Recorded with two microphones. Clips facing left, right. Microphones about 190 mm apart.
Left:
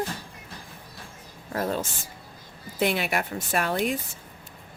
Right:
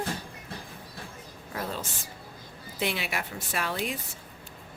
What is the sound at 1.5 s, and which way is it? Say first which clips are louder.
Speech: left 7 dB; 45° left (ahead or behind).